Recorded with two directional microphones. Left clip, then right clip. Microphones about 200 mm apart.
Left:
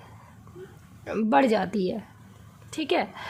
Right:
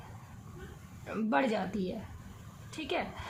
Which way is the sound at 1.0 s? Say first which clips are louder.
Left 9 dB; 45° left (ahead or behind).